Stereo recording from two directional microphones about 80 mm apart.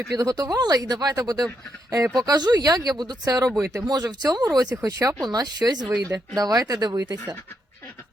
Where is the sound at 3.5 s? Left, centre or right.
Right.